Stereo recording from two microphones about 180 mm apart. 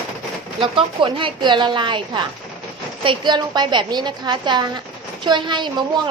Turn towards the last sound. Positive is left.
turn(degrees=-25)  # may be behind; listen again after turning